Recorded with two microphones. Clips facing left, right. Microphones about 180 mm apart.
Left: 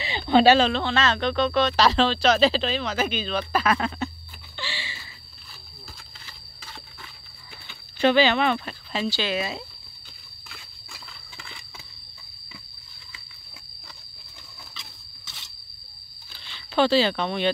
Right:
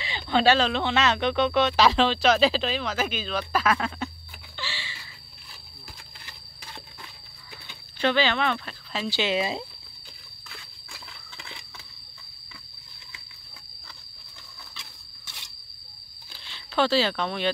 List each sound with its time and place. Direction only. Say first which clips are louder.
0.5 s speech: left 2 dB; 5° left (ahead or behind)
0.7 s speech: even; 15° right (ahead or behind)
4.6 s a sound: left 2 dB; centre (ahead or behind)
8.0 s speech: left 4 dB; 10° left (ahead or behind)
9.1 s speech: right 2 dB; 20° right (ahead or behind)
16.4 s speech: left 3 dB; centre (ahead or behind)